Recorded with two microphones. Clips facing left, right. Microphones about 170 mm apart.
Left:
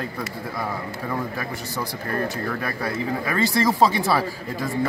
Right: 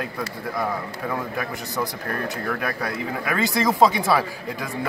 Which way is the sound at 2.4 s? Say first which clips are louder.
Even; centre (ahead or behind).